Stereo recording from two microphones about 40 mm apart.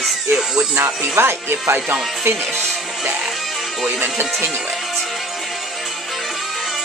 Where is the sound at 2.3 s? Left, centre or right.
Right.